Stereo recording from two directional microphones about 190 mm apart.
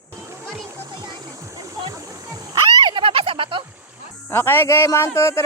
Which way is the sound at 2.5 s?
25° right (ahead or behind).